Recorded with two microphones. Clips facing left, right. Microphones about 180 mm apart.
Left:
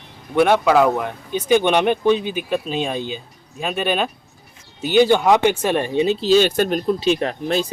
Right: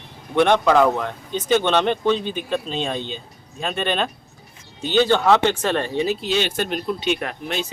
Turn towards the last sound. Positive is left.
turn(degrees=35)  # may be behind; listen again after turning